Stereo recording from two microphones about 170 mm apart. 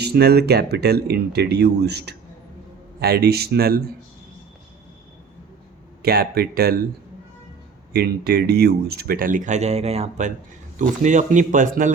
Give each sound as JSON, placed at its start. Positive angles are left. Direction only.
{"t": 0.0, "sound": "speech", "side_deg": -70}
{"t": 6.0, "sound": "speech", "side_deg": -65}
{"t": 7.9, "sound": "speech", "side_deg": -65}